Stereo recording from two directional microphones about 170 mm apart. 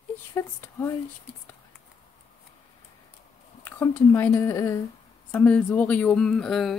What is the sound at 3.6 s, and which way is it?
Speech, 15° left (ahead or behind).